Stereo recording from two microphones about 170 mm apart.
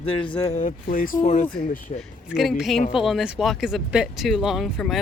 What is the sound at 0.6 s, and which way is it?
Speech, 50° left (ahead or behind).